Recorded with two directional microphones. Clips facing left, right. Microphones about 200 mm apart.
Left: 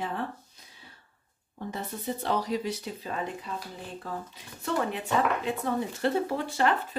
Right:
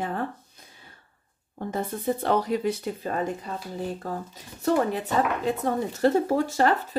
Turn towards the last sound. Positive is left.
turn(degrees=-40)  # may be behind; listen again after turning